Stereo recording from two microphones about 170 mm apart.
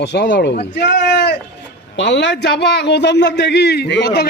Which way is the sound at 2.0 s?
90° left.